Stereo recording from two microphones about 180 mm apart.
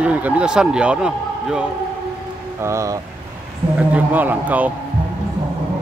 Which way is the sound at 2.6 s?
15° right (ahead or behind).